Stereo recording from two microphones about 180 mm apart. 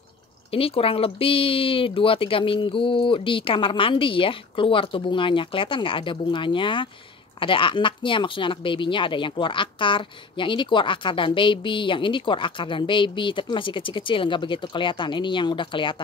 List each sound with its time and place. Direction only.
0.5 s speech: 30° left (ahead or behind)